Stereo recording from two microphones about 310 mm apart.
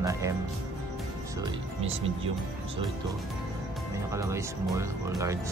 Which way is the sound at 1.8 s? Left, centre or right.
Centre.